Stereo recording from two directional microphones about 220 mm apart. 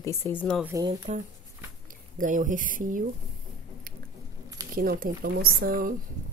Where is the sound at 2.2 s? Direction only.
35° right (ahead or behind).